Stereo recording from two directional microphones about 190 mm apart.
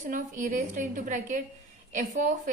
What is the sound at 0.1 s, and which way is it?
A woman's voice, 45° right (ahead or behind).